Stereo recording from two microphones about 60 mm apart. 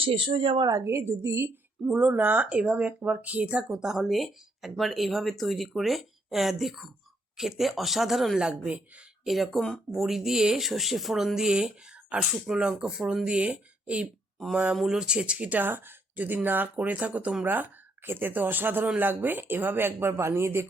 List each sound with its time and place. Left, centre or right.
0.9 s a woman's voice: right
1.9 s speech: right
3.7 s speech: centre
8.4 s speech: centre
9.2 s speech: centre; by 14.1 s right
14.8 s speech: centre; by 20.7 s right